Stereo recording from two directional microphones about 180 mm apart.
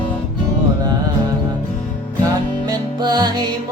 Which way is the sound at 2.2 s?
25° right (ahead or behind).